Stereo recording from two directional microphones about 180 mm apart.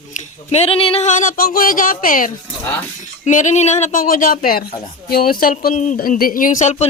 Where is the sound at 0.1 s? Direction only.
40° left (ahead or behind).